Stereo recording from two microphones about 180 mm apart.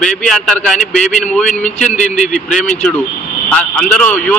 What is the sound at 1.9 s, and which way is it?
Speech, 40° left (ahead or behind).